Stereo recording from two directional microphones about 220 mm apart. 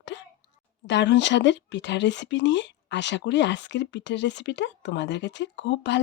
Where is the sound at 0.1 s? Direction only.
55° left (ahead or behind).